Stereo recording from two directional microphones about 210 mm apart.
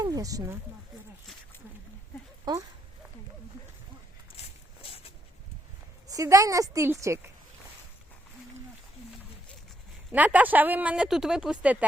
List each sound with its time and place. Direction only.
0.0 s speech: 15° right (ahead or behind)
2.5 s speech: 20° right (ahead or behind)
4.4 s a sound: 30° left (ahead or behind)
6.1 s speech: 15° right (ahead or behind)
10.1 s speech: 5° right (ahead or behind)